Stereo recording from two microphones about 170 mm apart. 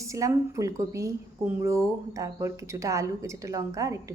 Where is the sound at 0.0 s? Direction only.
20° right (ahead or behind).